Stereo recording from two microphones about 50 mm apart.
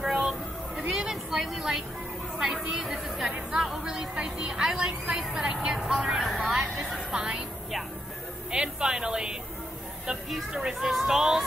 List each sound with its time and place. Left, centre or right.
0.0 s a sound: centre
0.8 s vehicle: centre
1.4 s a woman's voice: centre
6.3 s speech: right
8.5 s a woman's voice: centre